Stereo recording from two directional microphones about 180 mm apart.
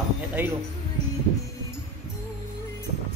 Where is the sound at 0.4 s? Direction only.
10° right (ahead or behind).